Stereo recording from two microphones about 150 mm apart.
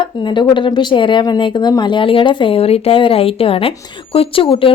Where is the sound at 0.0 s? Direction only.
30° left (ahead or behind).